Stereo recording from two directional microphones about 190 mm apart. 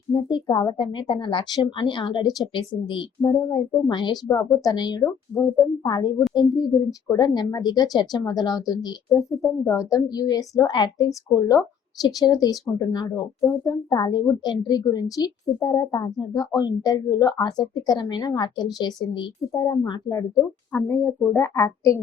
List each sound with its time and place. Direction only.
0.1 s speech: 25° left (ahead or behind)
6.7 s speech: centre (ahead or behind)
7.1 s a woman's voice: 20° left (ahead or behind)